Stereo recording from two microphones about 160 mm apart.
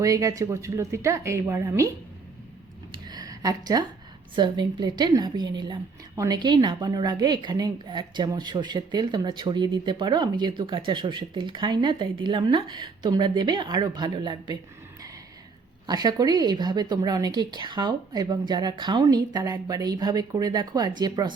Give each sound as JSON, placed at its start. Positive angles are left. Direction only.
{"t": 0.0, "sound": "a woman's voice", "side_deg": -20}
{"t": 2.9, "sound": "a sound", "side_deg": -25}
{"t": 4.4, "sound": "a woman's voice", "side_deg": -25}
{"t": 15.9, "sound": "a woman's voice", "side_deg": -25}